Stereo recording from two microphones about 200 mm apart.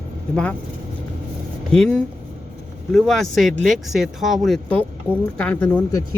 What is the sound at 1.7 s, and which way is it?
Speech, 5° left (ahead or behind).